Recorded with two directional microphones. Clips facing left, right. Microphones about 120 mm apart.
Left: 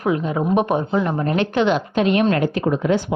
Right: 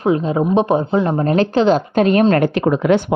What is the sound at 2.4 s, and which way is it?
Speech, 75° right (ahead or behind).